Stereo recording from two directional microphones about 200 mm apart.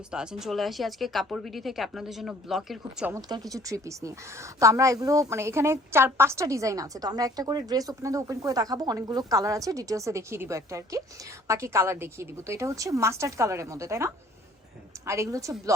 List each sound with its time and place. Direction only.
0.1 s speech: 5° right (ahead or behind)
3.2 s a woman's voice: 20° right (ahead or behind)